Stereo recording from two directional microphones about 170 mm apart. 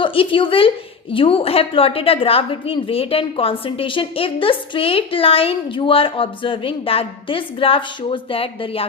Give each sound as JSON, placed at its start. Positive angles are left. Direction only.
{"t": 0.0, "sound": "a woman's voice", "side_deg": 30}